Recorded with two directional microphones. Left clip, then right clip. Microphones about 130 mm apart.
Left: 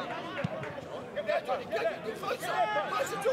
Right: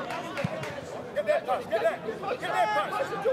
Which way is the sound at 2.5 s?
30° right (ahead or behind).